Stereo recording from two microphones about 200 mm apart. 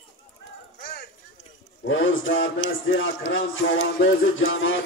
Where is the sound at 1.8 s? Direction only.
75° left (ahead or behind).